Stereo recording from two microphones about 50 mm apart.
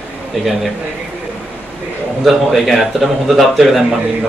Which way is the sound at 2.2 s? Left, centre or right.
Centre.